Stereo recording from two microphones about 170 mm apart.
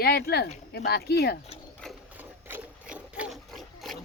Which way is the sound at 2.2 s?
10° right (ahead or behind).